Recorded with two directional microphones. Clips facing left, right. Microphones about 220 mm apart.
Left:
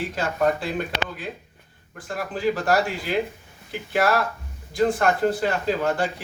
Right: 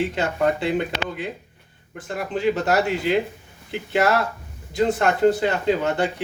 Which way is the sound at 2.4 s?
20° right (ahead or behind).